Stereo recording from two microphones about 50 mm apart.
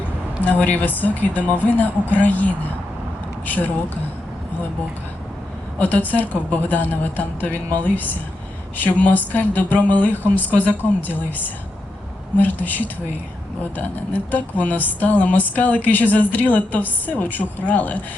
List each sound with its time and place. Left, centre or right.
0.4 s speech: left
5.8 s speech: left